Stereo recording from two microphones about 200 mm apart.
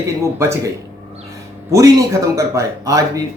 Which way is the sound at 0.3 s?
15° right (ahead or behind).